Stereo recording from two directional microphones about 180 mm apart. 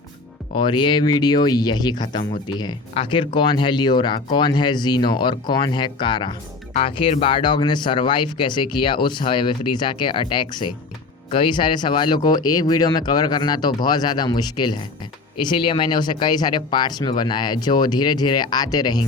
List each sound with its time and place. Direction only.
0.5 s speech: 25° left (ahead or behind)